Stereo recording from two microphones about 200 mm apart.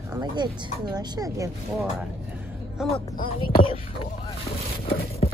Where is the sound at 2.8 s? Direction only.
5° right (ahead or behind).